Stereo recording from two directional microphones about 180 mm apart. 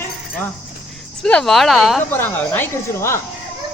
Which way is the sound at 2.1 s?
10° left (ahead or behind).